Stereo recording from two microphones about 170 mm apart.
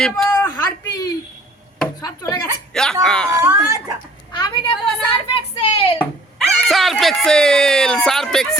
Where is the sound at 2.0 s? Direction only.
20° left (ahead or behind).